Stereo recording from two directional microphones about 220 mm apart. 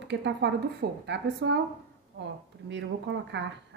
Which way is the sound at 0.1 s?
50° right (ahead or behind).